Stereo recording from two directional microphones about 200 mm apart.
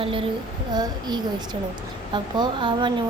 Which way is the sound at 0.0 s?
25° right (ahead or behind).